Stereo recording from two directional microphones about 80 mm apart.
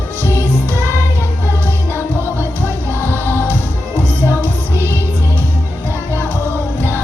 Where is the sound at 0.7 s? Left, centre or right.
Right.